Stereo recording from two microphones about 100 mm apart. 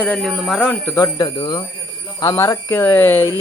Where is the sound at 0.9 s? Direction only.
35° left (ahead or behind).